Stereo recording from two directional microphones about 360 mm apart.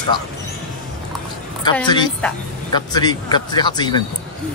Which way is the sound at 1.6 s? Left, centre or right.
Centre.